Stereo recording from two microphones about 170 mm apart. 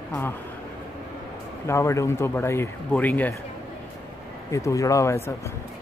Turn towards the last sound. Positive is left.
turn(degrees=15)  # may be behind; listen again after turning